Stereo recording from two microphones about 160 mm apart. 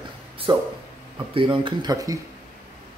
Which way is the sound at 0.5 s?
30° right (ahead or behind).